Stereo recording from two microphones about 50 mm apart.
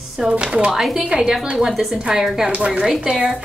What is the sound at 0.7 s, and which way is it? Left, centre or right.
Child singing, centre.